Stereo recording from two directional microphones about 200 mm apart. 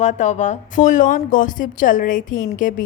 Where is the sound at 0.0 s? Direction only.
35° left (ahead or behind).